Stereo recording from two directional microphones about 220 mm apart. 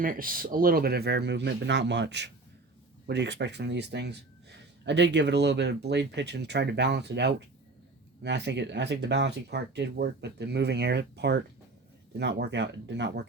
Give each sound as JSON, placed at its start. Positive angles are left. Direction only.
{"t": 0.0, "sound": "speech", "side_deg": -40}